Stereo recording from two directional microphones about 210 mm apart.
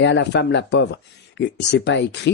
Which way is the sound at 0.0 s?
55° left (ahead or behind).